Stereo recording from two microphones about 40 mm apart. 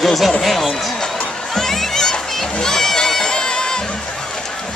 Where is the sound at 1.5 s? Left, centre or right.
Centre.